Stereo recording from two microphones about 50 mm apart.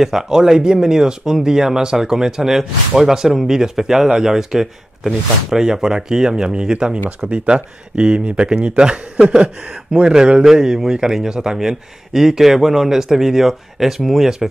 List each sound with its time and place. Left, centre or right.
0.0 s speech: centre